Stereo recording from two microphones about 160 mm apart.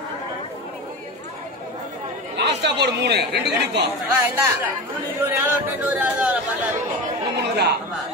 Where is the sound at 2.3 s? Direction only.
90° right.